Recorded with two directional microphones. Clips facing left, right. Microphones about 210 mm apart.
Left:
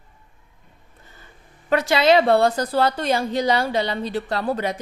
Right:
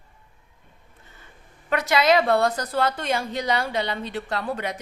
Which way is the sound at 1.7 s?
30° left (ahead or behind).